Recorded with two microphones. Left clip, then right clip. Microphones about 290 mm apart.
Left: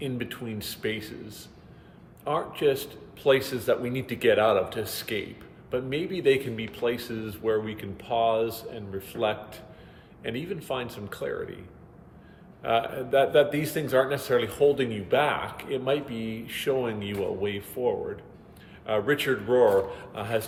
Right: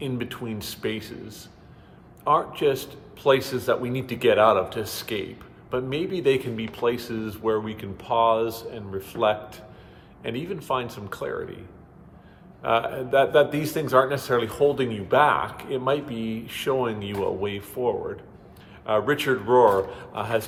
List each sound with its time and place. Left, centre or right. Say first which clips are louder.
0.0 s speech: right 2 dB; centre
12.6 s speech: right 3 dB; centre